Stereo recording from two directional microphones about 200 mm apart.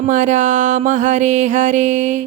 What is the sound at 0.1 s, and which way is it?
Music, 35° right (ahead or behind).